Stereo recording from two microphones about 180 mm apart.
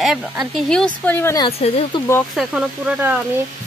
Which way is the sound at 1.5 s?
35° left (ahead or behind).